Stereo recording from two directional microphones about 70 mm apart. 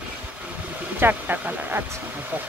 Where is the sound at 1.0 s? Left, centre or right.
Right.